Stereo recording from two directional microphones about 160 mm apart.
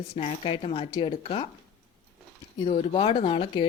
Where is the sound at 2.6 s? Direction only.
35° left (ahead or behind).